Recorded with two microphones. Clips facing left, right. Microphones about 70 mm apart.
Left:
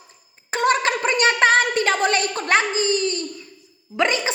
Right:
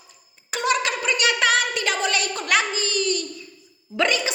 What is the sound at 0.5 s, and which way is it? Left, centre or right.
A woman's voice, left.